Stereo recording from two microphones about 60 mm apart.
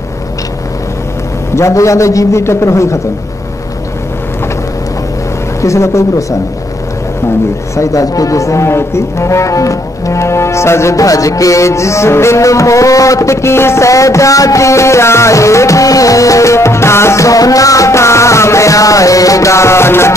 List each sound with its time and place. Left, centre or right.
1.5 s speech: left
5.6 s speech: left
7.7 s speech: left